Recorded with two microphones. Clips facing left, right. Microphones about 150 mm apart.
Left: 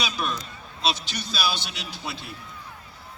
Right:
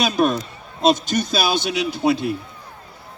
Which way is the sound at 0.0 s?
50° right (ahead or behind).